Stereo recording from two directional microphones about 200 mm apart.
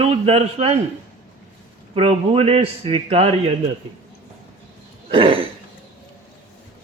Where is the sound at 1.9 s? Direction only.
30° right (ahead or behind).